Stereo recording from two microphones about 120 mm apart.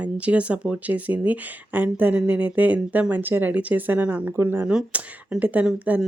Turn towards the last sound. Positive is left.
turn(degrees=-10)  # may be behind; listen again after turning